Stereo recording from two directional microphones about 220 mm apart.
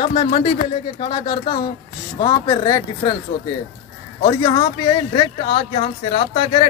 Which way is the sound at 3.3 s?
35° left (ahead or behind).